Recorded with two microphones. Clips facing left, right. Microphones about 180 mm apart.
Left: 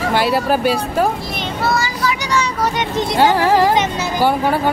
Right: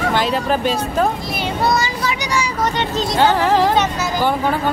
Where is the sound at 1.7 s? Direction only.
20° right (ahead or behind).